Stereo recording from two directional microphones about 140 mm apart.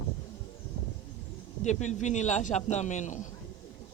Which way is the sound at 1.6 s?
60° left (ahead or behind).